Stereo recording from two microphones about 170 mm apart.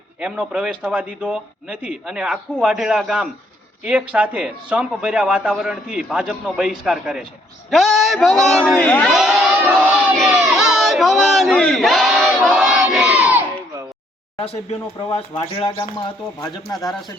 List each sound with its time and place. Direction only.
0.2 s speech: 5° right (ahead or behind)
10.4 s crowd: centre (ahead or behind)
14.3 s speech: 35° left (ahead or behind)